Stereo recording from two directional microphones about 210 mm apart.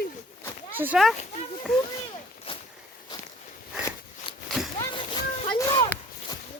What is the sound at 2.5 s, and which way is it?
Walk, 25° left (ahead or behind).